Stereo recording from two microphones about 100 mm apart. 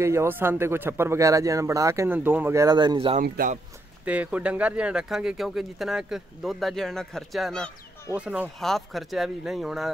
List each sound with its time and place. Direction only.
0.0 s speech: 30° right (ahead or behind)
2.0 s speech: 20° right (ahead or behind)
2.6 s speech: 45° right (ahead or behind)
4.0 s speech: 15° right (ahead or behind); by 7.7 s 5° left (ahead or behind)
8.1 s speech: 15° right (ahead or behind)
8.5 s speech: 5° left (ahead or behind)